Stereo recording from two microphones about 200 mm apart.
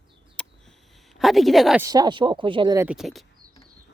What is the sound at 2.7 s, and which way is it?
Speech, 5° right (ahead or behind).